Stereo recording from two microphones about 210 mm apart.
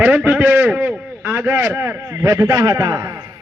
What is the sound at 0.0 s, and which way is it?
A man's voice, 5° right (ahead or behind).